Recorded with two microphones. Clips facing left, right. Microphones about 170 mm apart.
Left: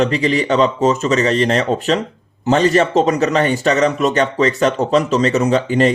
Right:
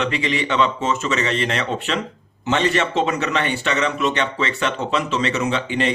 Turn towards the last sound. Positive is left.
turn(degrees=40)  # may be behind; listen again after turning